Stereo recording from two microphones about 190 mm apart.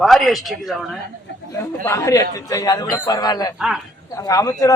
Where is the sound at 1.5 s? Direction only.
15° left (ahead or behind).